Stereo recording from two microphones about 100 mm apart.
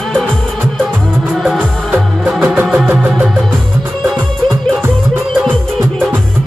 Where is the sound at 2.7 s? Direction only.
15° right (ahead or behind).